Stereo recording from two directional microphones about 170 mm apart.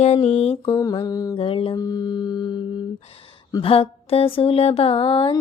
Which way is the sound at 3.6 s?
35° left (ahead or behind).